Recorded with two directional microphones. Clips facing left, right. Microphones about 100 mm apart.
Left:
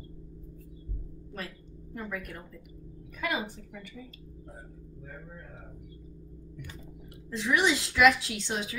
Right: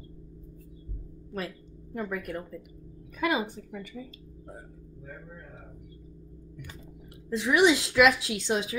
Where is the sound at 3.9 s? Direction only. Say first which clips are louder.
Right 3 dB; 20° right (ahead or behind).